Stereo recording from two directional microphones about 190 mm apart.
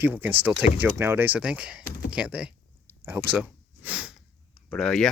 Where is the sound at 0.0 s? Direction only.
10° right (ahead or behind).